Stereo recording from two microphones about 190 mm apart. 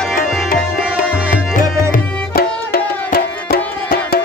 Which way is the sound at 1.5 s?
45° left (ahead or behind).